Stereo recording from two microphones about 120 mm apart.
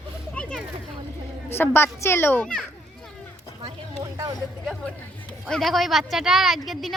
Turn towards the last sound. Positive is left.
turn(degrees=0)  # may be behind; listen again after turning